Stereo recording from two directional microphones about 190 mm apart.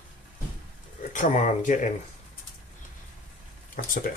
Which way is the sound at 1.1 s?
40° left (ahead or behind).